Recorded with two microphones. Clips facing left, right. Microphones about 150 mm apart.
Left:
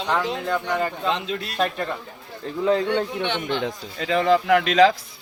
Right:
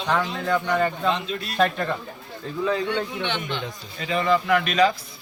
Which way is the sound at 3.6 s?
90° left.